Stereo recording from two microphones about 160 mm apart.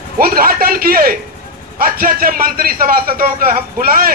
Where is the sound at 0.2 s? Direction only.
65° right (ahead or behind).